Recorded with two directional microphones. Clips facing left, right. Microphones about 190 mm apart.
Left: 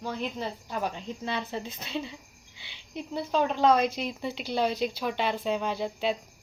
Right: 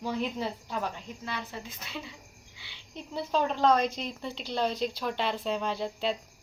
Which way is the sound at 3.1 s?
5° left (ahead or behind).